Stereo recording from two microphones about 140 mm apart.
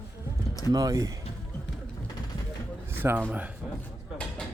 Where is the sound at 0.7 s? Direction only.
25° right (ahead or behind).